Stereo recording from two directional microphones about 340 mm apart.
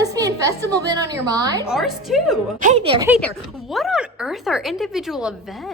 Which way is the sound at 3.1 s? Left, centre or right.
Centre.